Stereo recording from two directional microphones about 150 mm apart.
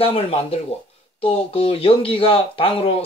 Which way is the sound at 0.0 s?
40° left (ahead or behind).